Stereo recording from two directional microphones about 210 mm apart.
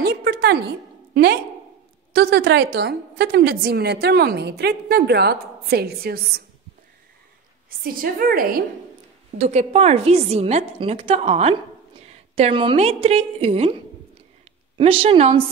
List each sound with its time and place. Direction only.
0.0 s a sound: 50° right (ahead or behind)
2.1 s a woman's voice: 50° right (ahead or behind)
7.8 s a woman's voice: 45° right (ahead or behind)
9.4 s a woman's voice: 30° right (ahead or behind)
14.8 s a woman's voice: 25° right (ahead or behind)